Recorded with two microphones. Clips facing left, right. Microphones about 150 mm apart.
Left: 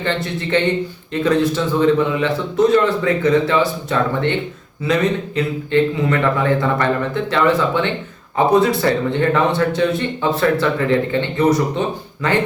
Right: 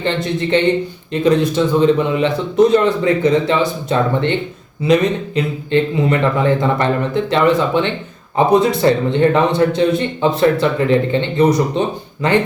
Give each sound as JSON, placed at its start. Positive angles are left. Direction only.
{"t": 0.0, "sound": "a man's voice", "side_deg": -20}